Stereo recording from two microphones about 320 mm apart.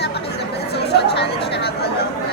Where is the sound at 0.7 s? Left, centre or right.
Left.